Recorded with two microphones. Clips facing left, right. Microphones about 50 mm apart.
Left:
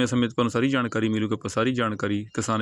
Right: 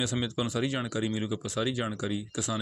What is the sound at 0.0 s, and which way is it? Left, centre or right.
Speech, left.